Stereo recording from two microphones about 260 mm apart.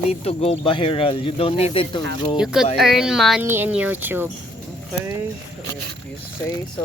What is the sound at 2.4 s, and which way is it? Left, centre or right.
Speech, centre.